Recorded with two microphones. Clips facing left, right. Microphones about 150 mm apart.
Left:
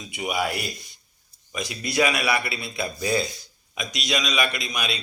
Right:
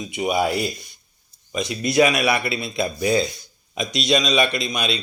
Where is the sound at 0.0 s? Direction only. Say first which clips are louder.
Right 6 dB; 20° right (ahead or behind).